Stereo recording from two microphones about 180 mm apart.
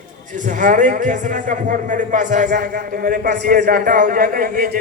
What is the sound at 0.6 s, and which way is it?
A man's voice, 45° right (ahead or behind).